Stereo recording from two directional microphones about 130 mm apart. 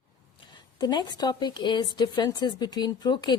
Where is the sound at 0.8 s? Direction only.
35° left (ahead or behind).